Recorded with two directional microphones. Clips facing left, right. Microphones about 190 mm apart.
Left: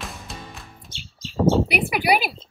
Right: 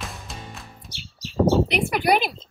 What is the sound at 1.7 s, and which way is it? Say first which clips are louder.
Speech: even; 10° left (ahead or behind).